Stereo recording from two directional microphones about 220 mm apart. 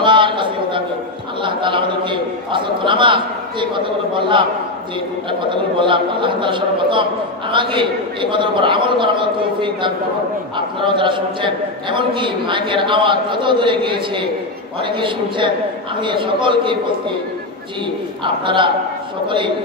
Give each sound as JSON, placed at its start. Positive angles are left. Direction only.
{"t": 0.0, "sound": "a sound", "side_deg": -20}
{"t": 1.4, "sound": "a man's voice", "side_deg": -20}
{"t": 5.5, "sound": "a man's voice", "side_deg": -20}
{"t": 18.2, "sound": "a man's voice", "side_deg": -20}